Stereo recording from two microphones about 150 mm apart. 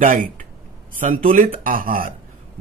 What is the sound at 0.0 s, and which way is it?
Speech, 65° right (ahead or behind).